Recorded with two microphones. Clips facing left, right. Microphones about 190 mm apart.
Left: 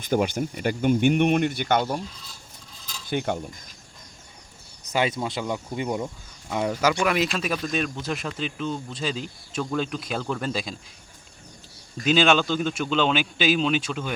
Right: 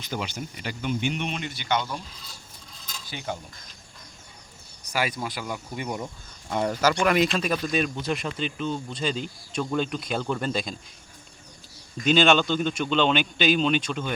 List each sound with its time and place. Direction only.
0.0 s speech: 50° left (ahead or behind)
3.1 s mechanisms: 55° left (ahead or behind)
4.9 s speech: 25° left (ahead or behind)
6.5 s speech: 5° left (ahead or behind)
12.0 s speech: 5° left (ahead or behind)